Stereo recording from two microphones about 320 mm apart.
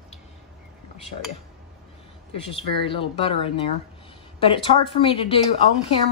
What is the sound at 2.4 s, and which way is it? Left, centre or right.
A woman's voice, centre.